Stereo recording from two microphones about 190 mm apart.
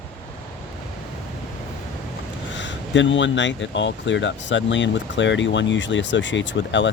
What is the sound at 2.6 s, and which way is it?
Speech, 75° left (ahead or behind).